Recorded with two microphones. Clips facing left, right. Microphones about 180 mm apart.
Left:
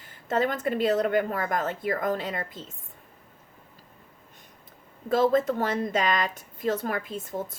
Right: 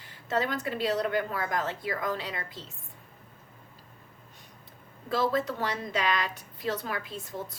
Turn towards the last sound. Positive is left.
turn(degrees=50)  # may be behind; listen again after turning